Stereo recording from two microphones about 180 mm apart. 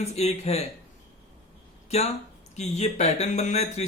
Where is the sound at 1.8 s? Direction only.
35° left (ahead or behind).